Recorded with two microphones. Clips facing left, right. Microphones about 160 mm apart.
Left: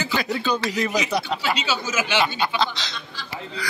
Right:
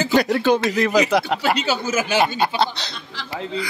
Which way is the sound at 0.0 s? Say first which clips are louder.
Right 7 dB; 40° right (ahead or behind).